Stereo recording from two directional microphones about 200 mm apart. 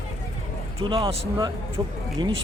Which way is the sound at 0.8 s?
25° right (ahead or behind).